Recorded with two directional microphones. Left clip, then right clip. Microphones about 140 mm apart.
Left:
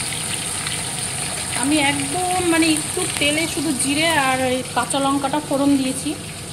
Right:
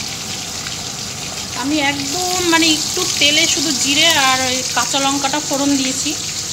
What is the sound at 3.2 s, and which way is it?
Frying, 5° right (ahead or behind).